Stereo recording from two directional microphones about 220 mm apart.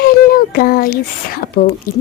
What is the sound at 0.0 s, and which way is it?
A woman's voice, 45° left (ahead or behind).